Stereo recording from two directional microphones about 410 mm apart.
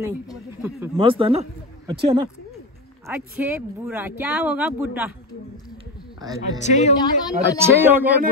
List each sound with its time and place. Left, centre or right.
0.0 s a man's voice: centre
6.6 s a woman's voice: centre
7.3 s speech: centre